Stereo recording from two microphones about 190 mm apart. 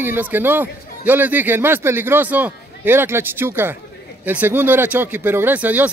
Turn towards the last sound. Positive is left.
turn(degrees=-10)  # may be behind; listen again after turning